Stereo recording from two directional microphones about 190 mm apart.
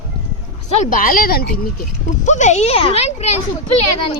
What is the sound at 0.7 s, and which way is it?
Speech, 45° left (ahead or behind).